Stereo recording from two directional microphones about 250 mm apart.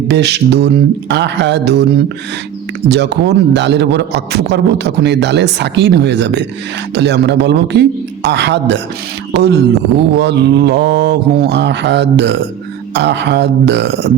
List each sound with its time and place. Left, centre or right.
0.1 s a man's voice: right
2.9 s a man's voice: right